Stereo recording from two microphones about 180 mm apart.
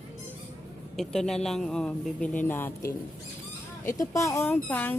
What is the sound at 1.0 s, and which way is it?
Speech, centre (ahead or behind).